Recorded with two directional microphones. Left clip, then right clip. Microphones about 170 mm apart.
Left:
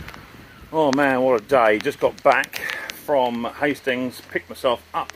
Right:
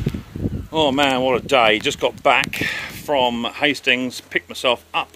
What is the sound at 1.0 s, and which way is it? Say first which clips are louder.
Speech: right 1 dB; 30° right (ahead or behind).